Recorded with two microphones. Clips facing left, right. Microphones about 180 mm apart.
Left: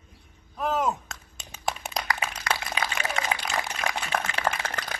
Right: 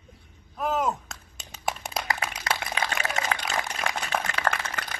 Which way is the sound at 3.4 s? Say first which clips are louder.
Even; 5° left (ahead or behind).